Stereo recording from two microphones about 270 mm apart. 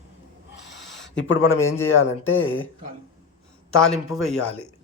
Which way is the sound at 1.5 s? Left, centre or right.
Centre.